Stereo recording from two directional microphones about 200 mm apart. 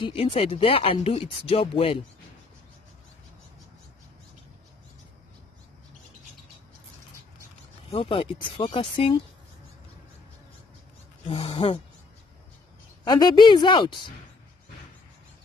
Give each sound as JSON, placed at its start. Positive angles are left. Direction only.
{"t": 0.0, "sound": "speech", "side_deg": 25}
{"t": 7.9, "sound": "speech", "side_deg": 25}
{"t": 11.2, "sound": "speech", "side_deg": 25}
{"t": 13.0, "sound": "speech", "side_deg": 20}